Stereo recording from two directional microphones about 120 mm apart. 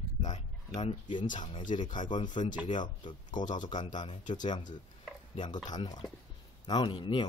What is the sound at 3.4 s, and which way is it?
Speech, 90° left.